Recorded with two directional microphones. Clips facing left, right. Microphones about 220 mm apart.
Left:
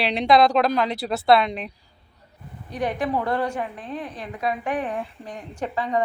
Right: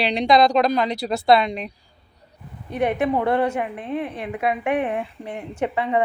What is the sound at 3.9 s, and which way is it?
Speech, 60° right (ahead or behind).